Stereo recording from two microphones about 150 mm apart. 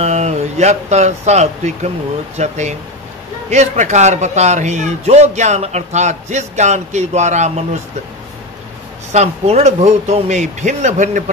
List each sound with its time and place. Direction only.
0.0 s a man's voice: 45° right (ahead or behind)
9.1 s a man's voice: 45° right (ahead or behind)